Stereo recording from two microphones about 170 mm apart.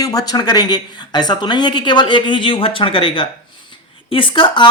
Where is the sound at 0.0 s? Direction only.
20° left (ahead or behind).